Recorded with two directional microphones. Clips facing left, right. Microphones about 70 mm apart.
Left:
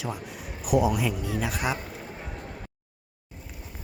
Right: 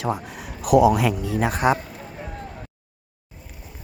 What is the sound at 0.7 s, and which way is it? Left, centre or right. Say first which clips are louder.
Speech: right 8 dB; right.